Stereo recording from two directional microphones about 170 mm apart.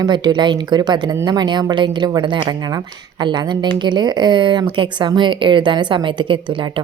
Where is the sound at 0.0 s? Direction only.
25° right (ahead or behind).